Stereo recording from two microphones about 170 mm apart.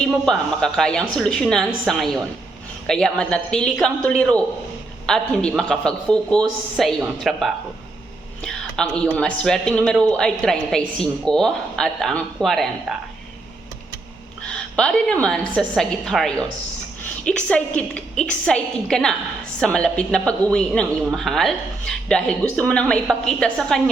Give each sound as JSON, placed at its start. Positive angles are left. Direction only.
{"t": 0.0, "sound": "a woman's voice", "side_deg": 5}
{"t": 14.5, "sound": "a woman's voice", "side_deg": 5}